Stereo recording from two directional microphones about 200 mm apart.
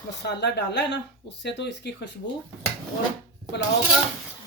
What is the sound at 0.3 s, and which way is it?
Speech, 55° left (ahead or behind).